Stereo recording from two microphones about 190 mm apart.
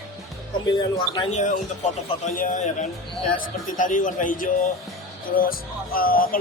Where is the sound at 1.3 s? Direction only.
40° left (ahead or behind).